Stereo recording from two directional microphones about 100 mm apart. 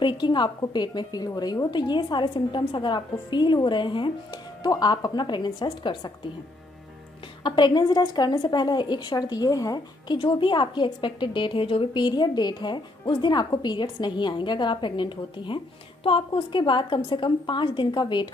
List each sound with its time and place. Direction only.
0.0 s a woman's voice: 50° left (ahead or behind)
4.6 s a woman's voice: 40° left (ahead or behind)
7.4 s a woman's voice: 50° left (ahead or behind)
10.1 s a woman's voice: 55° left (ahead or behind)